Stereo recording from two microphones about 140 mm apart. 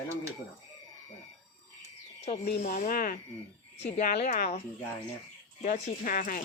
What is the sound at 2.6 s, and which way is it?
A woman's voice, 75° left (ahead or behind).